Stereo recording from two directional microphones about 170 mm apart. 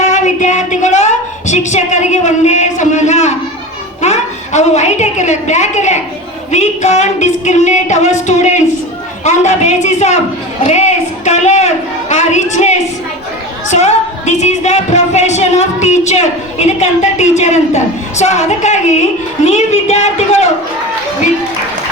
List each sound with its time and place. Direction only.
0.0 s a sound: 45° left (ahead or behind)
4.0 s a woman's voice: 40° left (ahead or behind)
6.5 s music: 40° left (ahead or behind)
13.7 s a woman's voice: 40° left (ahead or behind)